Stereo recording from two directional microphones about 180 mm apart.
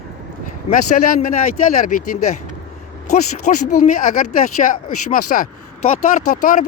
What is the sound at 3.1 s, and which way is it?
Speech, 45° left (ahead or behind).